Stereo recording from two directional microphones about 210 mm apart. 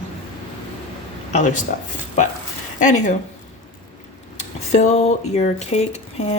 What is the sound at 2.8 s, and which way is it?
Speech, 35° left (ahead or behind).